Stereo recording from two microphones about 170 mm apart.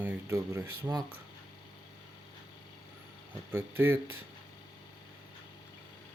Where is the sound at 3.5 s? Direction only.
15° right (ahead or behind).